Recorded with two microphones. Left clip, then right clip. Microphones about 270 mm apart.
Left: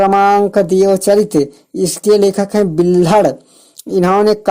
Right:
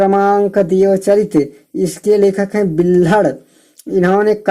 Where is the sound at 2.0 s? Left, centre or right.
Left.